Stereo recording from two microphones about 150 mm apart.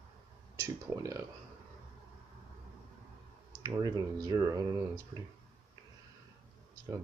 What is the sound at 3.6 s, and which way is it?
Speech, 25° right (ahead or behind).